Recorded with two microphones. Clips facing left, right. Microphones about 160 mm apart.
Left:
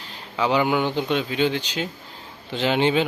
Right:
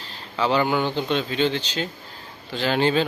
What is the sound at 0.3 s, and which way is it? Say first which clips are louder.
Speech: even; 10° left (ahead or behind).